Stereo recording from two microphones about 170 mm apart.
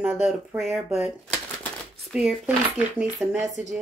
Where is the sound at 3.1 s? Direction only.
20° right (ahead or behind).